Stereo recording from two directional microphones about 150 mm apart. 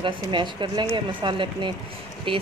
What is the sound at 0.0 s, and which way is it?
Speech, 30° right (ahead or behind).